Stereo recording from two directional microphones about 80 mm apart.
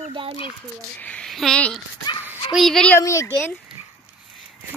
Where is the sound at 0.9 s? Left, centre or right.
Centre.